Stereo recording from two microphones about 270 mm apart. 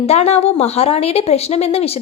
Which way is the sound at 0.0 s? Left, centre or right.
Left.